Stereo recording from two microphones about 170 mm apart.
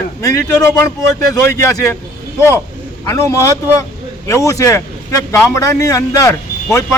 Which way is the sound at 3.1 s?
15° left (ahead or behind).